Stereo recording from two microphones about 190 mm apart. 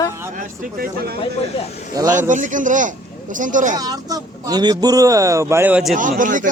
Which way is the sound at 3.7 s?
20° right (ahead or behind).